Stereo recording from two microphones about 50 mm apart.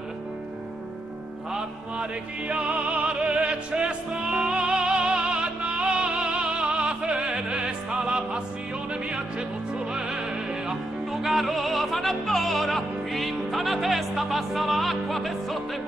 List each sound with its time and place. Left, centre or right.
1.5 s music: right
9.9 s music: centre